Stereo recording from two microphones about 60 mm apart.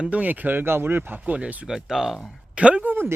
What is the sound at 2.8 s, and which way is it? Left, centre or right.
Speech, right.